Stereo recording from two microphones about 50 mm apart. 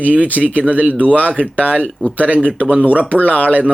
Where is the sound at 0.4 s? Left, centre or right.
Right.